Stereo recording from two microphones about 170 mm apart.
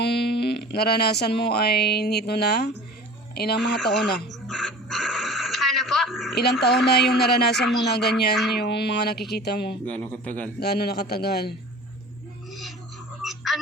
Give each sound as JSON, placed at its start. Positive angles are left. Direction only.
{"t": 0.0, "sound": "speech", "side_deg": 75}
{"t": 3.8, "sound": "a sound", "side_deg": 5}
{"t": 6.3, "sound": "speech", "side_deg": 75}
{"t": 7.0, "sound": "speech", "side_deg": 0}
{"t": 7.9, "sound": "speech", "side_deg": 75}
{"t": 9.8, "sound": "a man's voice", "side_deg": 10}
{"t": 10.6, "sound": "speech", "side_deg": 70}
{"t": 13.2, "sound": "a sound", "side_deg": 0}